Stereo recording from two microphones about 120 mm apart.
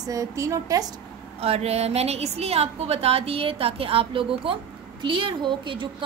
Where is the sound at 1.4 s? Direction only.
55° right (ahead or behind).